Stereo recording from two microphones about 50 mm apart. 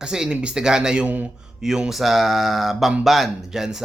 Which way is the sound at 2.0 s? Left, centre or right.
Centre.